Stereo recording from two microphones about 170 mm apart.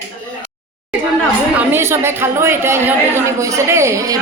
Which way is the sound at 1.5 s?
15° right (ahead or behind).